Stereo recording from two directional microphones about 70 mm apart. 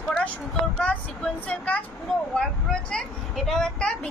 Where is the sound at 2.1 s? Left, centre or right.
Centre.